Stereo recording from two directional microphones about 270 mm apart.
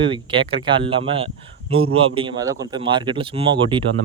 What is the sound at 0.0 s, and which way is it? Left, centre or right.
Speech, centre.